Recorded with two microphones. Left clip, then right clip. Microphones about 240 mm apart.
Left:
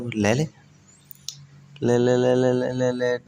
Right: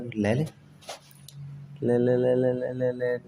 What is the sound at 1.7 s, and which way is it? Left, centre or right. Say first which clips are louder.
Speech: left 4 dB; left.